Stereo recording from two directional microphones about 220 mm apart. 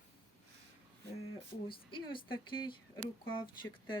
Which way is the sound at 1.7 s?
20° left (ahead or behind).